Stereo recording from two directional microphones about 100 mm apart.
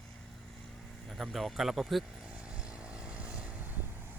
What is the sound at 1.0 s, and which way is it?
Vehicle, centre (ahead or behind).